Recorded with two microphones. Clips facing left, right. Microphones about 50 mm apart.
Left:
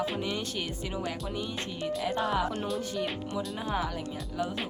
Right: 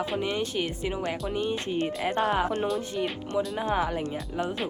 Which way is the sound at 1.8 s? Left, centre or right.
Right.